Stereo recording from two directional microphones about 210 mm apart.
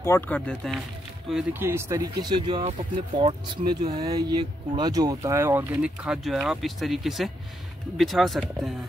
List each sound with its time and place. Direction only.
0.0 s speech: 10° left (ahead or behind)
1.3 s speech: 10° right (ahead or behind)